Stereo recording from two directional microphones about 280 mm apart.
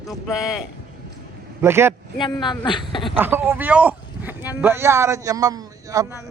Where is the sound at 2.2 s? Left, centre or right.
Centre.